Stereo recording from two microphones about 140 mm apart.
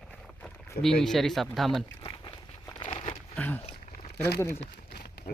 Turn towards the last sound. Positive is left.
turn(degrees=90)